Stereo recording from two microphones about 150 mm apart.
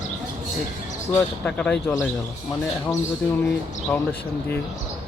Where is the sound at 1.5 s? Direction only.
5° left (ahead or behind).